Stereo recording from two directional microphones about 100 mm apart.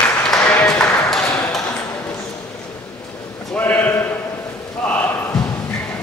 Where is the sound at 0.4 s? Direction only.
10° left (ahead or behind).